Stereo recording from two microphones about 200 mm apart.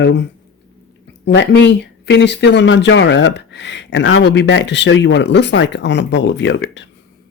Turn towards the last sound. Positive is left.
turn(degrees=65)  # may be behind; listen again after turning